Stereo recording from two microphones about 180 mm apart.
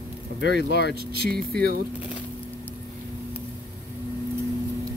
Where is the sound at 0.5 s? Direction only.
60° right (ahead or behind).